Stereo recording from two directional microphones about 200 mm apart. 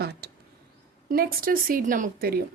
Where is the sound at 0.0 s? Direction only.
55° right (ahead or behind).